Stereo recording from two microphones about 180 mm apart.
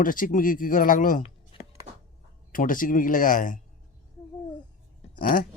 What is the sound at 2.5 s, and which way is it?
Speech, 50° left (ahead or behind).